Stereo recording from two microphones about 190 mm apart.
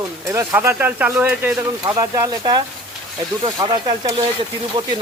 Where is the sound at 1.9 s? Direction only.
20° right (ahead or behind).